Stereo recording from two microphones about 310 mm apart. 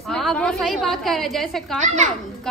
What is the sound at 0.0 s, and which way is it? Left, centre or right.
A woman's voice, centre.